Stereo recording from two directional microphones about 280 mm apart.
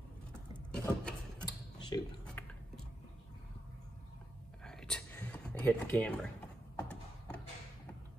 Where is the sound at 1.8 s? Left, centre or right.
Centre.